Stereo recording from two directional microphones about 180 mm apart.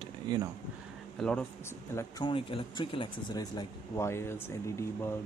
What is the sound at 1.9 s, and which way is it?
Speech, 25° left (ahead or behind).